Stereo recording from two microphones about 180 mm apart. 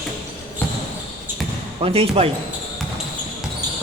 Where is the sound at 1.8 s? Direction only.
30° right (ahead or behind).